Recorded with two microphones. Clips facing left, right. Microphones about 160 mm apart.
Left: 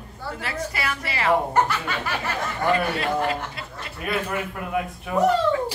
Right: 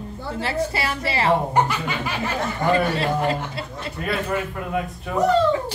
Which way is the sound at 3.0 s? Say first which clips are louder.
Right 2 dB; 30° right (ahead or behind).